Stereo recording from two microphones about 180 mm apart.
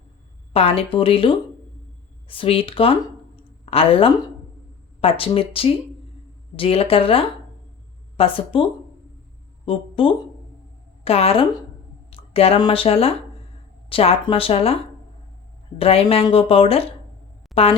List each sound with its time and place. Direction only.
0.5 s a woman's voice: 30° left (ahead or behind)
9.6 s a woman's voice: 30° left (ahead or behind)
15.8 s a woman's voice: 35° left (ahead or behind)